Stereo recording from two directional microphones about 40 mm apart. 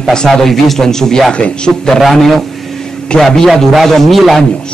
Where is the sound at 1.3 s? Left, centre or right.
Left.